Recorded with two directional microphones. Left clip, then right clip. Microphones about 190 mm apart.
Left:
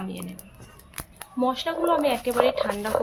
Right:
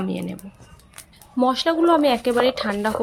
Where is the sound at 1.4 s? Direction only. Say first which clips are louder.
Right 6 dB; 35° right (ahead or behind).